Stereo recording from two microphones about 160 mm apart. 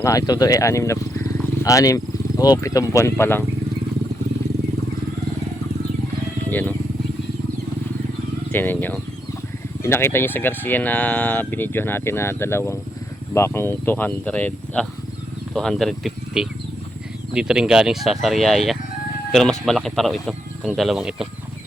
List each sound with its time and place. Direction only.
0.0 s speech: 20° left (ahead or behind)
6.5 s speech: 10° left (ahead or behind)
8.5 s speech: 15° left (ahead or behind); by 21.2 s 5° right (ahead or behind)